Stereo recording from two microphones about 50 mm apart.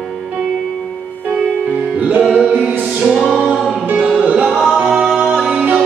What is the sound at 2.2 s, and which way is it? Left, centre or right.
Music, centre.